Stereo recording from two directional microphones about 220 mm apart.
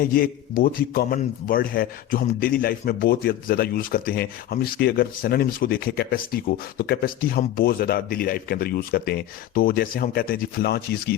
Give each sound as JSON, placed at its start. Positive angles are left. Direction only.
{"t": 0.0, "sound": "a man's voice", "side_deg": 40}